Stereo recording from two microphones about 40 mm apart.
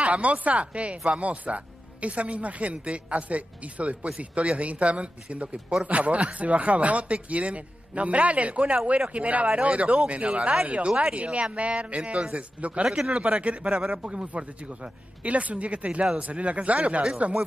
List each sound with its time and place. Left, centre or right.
0.0 s speech: right
12.8 s a man's voice: centre
13.1 s speech: right
13.7 s a man's voice: centre
14.0 s speech: right